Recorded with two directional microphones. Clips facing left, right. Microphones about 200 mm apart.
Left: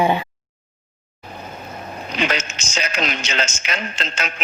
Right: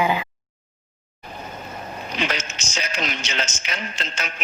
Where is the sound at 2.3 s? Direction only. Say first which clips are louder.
Left 4 dB; 90° left.